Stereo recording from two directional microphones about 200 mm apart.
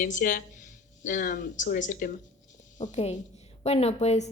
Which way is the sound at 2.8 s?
30° left (ahead or behind).